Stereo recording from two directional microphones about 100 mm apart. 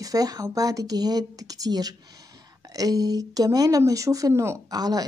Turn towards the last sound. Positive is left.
turn(degrees=-40)  # may be behind; listen again after turning